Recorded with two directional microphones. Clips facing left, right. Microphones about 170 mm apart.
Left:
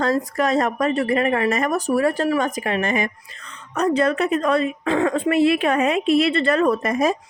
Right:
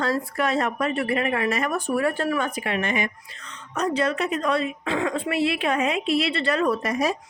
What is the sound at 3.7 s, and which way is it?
A woman's voice, 60° left (ahead or behind).